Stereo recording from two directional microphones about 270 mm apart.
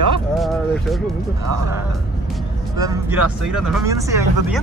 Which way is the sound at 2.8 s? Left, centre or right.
Centre.